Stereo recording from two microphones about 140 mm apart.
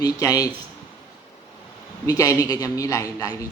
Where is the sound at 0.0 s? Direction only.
25° left (ahead or behind).